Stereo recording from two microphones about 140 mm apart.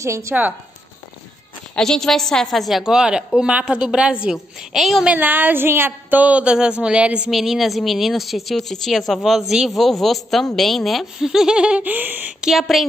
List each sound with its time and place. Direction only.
0.0 s speech: 20° right (ahead or behind)
1.8 s a woman's voice: 5° left (ahead or behind)